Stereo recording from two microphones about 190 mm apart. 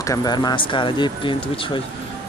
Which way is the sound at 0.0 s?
20° left (ahead or behind).